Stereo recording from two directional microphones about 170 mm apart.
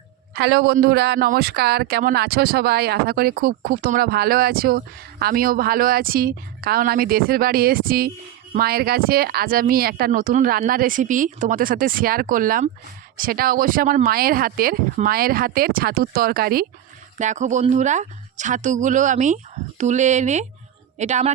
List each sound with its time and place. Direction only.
0.3 s speech: 85° right; by 16.6 s 60° right (ahead or behind)
17.2 s speech: 45° right (ahead or behind)